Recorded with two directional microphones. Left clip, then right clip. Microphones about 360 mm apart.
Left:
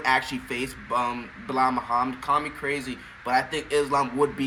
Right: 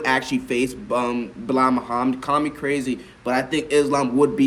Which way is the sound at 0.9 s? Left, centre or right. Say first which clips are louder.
Right 3 dB; centre.